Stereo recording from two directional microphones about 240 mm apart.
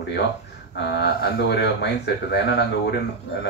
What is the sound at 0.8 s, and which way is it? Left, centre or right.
Speech, left.